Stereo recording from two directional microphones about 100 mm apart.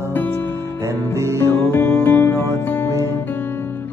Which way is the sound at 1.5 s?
25° left (ahead or behind).